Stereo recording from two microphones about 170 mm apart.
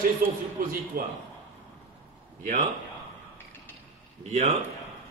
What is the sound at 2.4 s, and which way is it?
Speech, 50° right (ahead or behind).